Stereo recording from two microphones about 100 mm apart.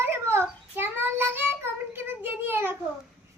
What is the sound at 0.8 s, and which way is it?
Child singing, 20° right (ahead or behind).